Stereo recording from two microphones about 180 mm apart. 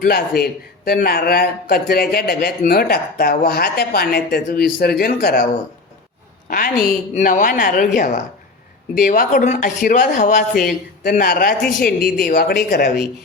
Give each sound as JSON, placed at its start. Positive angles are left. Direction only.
{"t": 0.0, "sound": "a man's voice", "side_deg": 60}
{"t": 6.5, "sound": "a man's voice", "side_deg": 50}